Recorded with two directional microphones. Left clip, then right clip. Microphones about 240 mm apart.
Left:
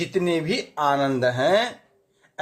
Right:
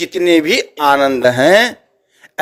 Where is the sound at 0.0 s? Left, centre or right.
Right.